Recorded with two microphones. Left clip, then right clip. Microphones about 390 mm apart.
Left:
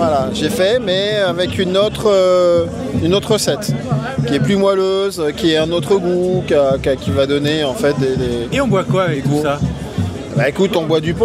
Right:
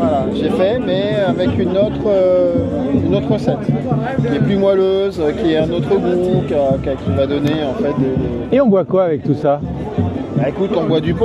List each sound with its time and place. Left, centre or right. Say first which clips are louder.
0.0 s speech: left 1 dB; left
8.5 s speech: right 4 dB; right
10.4 s speech: left 2 dB; left